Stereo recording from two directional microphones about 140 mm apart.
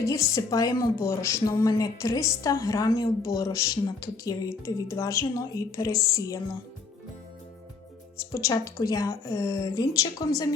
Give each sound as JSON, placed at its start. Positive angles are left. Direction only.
{"t": 0.0, "sound": "a woman's voice", "side_deg": 20}
{"t": 8.3, "sound": "a woman's voice", "side_deg": 20}